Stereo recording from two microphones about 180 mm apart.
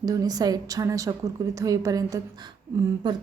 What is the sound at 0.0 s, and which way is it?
A woman's voice, 20° right (ahead or behind).